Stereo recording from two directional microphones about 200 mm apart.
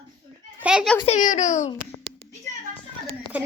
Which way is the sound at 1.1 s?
40° left (ahead or behind).